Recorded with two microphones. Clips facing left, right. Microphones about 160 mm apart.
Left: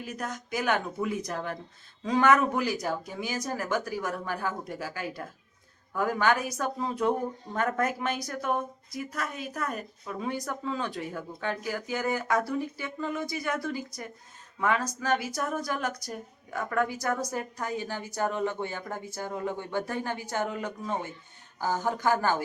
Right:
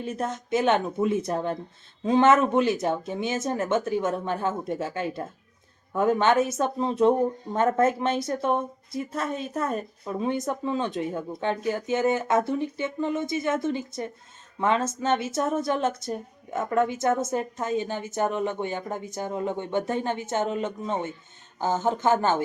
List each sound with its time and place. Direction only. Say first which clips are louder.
0.0 s a woman's voice: right 6 dB; 25° right (ahead or behind)